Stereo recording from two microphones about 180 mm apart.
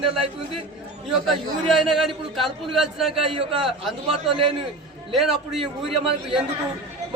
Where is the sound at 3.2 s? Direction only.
30° right (ahead or behind).